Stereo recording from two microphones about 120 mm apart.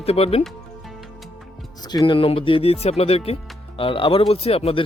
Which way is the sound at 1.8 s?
40° left (ahead or behind).